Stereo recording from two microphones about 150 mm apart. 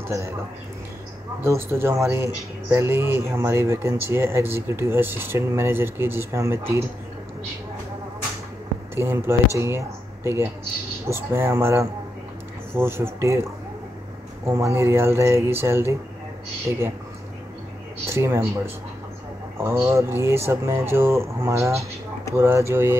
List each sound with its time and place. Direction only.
1.4 s speech: 15° right (ahead or behind)
8.9 s speech: 15° right (ahead or behind)
18.1 s speech: 15° right (ahead or behind)
19.6 s speech: 20° right (ahead or behind)